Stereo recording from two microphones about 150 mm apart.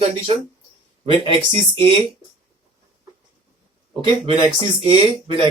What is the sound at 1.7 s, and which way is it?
Speech, 35° right (ahead or behind).